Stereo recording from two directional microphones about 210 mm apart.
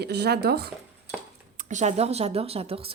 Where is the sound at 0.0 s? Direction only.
50° right (ahead or behind).